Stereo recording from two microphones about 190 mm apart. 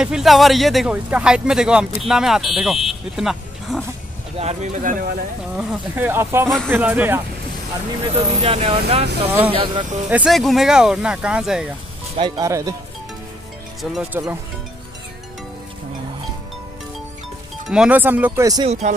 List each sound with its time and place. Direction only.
0.0 s speech: centre (ahead or behind)
4.4 s speech: 35° right (ahead or behind)
5.6 s speech: 5° right (ahead or behind)
8.0 s speech: 30° right (ahead or behind)
10.0 s speech: 5° right (ahead or behind)
12.2 s speech: 20° right (ahead or behind)
13.9 s speech: centre (ahead or behind)
17.6 s speech: 5° right (ahead or behind)
18.7 s speech: 35° right (ahead or behind)